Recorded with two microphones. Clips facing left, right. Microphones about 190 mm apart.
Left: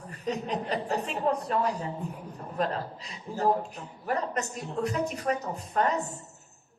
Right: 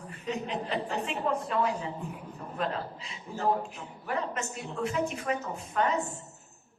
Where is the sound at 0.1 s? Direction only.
40° left (ahead or behind).